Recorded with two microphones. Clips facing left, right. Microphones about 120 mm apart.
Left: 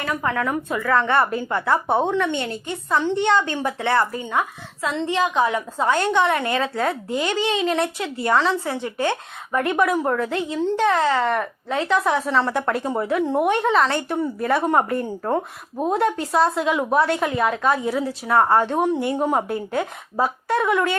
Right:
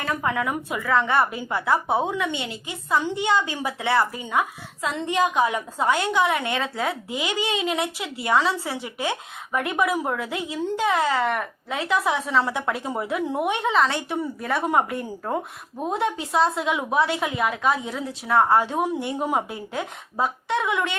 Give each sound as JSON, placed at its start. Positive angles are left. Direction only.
{"t": 0.2, "sound": "a woman's voice", "side_deg": -15}
{"t": 6.0, "sound": "a woman's voice", "side_deg": -5}